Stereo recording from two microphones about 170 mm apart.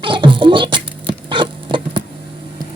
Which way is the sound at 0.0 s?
30° right (ahead or behind).